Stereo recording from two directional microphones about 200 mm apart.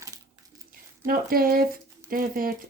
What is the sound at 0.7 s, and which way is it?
Speech, 45° right (ahead or behind).